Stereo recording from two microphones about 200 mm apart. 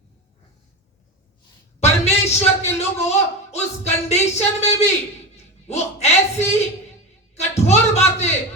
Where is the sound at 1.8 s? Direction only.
30° left (ahead or behind).